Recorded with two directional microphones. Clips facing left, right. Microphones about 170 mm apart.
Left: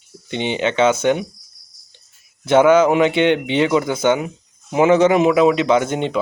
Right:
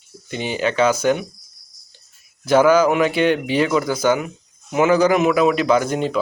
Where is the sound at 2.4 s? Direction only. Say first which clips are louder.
Left 2 dB; 25° left (ahead or behind).